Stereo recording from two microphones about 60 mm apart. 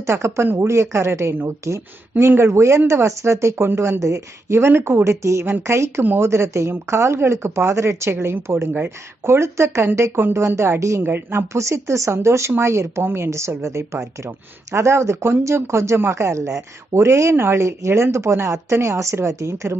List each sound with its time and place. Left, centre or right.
0.0 s speech: right
5.1 s a woman's voice: right
5.4 s a woman's voice: right
11.0 s speech: right
11.5 s speech: right